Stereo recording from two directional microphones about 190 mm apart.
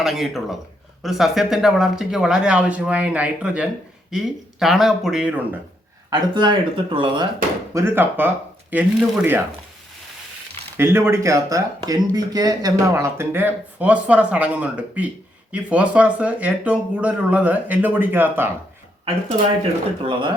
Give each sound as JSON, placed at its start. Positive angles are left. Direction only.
{"t": 0.0, "sound": "speech", "side_deg": 0}
{"t": 6.1, "sound": "speech", "side_deg": -25}
{"t": 7.7, "sound": "speech", "side_deg": -15}
{"t": 10.8, "sound": "speech", "side_deg": -10}